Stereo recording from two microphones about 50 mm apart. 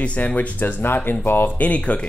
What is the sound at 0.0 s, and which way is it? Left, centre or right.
Speech, left.